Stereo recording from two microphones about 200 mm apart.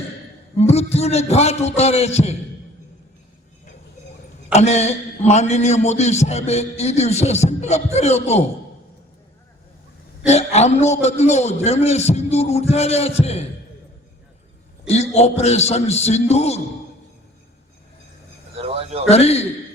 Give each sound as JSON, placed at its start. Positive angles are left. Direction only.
{"t": 0.6, "sound": "a man's voice", "side_deg": 30}
{"t": 4.5, "sound": "a man's voice", "side_deg": 35}
{"t": 10.2, "sound": "a man's voice", "side_deg": 35}
{"t": 14.8, "sound": "a man's voice", "side_deg": 35}
{"t": 18.5, "sound": "speech", "side_deg": -30}
{"t": 19.0, "sound": "a man's voice", "side_deg": 30}